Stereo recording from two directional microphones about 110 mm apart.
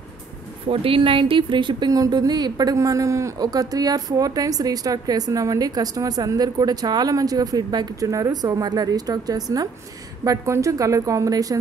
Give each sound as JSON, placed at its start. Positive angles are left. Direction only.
{"t": 0.7, "sound": "a woman's voice", "side_deg": -55}